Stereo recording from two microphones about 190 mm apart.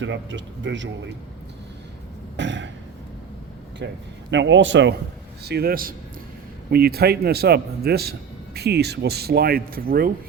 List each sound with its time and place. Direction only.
0.0 s a man's voice: 75° right (ahead or behind)
2.3 s a sound: 70° right (ahead or behind)
4.3 s a man's voice: 70° right (ahead or behind)
5.5 s a man's voice: 55° right (ahead or behind)